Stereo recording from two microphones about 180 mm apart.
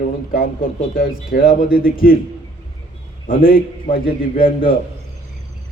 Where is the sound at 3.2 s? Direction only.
50° left (ahead or behind).